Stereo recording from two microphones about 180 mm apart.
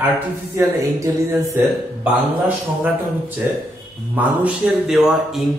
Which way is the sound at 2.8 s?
10° right (ahead or behind).